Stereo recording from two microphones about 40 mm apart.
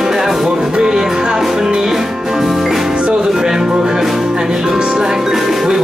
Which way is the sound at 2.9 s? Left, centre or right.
Centre.